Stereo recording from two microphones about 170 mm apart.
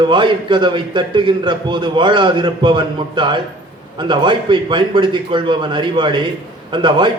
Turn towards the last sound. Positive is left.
turn(degrees=-30)  # may be behind; listen again after turning